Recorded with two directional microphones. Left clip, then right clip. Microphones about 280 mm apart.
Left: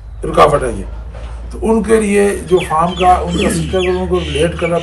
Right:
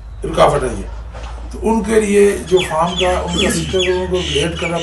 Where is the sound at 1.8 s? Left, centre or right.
Centre.